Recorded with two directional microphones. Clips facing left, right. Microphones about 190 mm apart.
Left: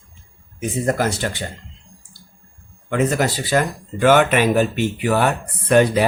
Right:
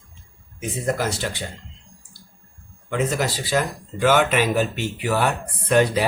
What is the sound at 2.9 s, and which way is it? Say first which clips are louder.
Speech: left 4 dB; 55° left (ahead or behind).